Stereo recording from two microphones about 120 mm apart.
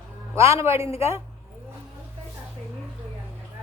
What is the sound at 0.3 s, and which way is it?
Speech, 20° right (ahead or behind).